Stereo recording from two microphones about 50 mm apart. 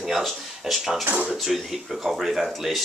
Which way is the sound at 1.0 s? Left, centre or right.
Right.